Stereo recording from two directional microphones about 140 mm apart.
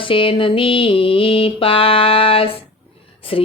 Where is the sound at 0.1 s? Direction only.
40° left (ahead or behind).